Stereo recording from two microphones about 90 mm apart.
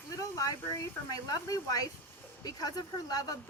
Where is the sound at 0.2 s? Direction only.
40° left (ahead or behind).